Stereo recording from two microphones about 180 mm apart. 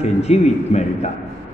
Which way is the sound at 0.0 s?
40° left (ahead or behind).